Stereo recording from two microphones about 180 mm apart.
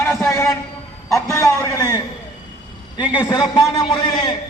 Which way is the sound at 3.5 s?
25° left (ahead or behind).